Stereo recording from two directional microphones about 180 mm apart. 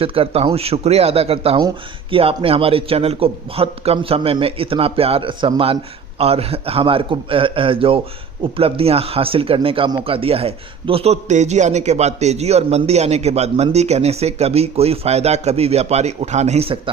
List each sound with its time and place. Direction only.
0.0 s a man's voice: 30° right (ahead or behind)